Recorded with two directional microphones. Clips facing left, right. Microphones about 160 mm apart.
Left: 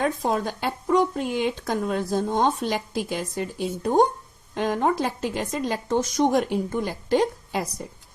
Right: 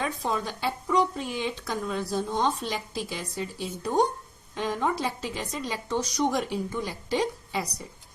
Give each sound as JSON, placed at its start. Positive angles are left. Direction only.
{"t": 0.0, "sound": "speech", "side_deg": 50}